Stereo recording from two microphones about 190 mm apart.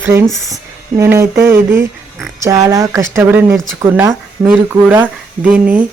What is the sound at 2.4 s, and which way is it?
Speech, 15° right (ahead or behind).